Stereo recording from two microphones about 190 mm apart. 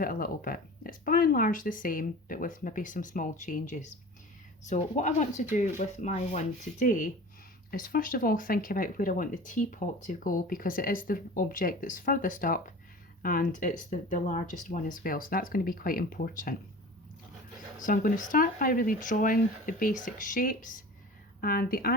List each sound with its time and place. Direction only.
0.0 s speech: 50° left (ahead or behind)
17.7 s speech: 45° left (ahead or behind)